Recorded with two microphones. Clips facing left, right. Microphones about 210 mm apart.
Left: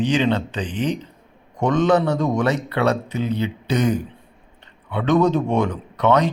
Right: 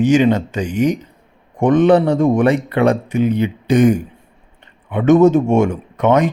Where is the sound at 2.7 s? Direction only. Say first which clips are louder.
Right 5 dB; 15° right (ahead or behind).